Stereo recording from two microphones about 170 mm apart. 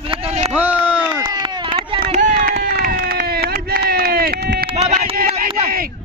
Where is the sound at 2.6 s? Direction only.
60° right (ahead or behind).